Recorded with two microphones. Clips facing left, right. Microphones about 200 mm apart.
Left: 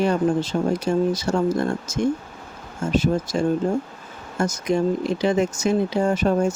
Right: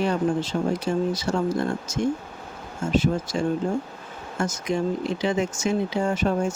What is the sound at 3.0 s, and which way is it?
Speech, 40° left (ahead or behind).